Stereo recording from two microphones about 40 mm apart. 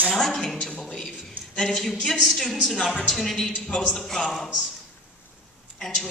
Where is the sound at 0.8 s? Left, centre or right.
Centre.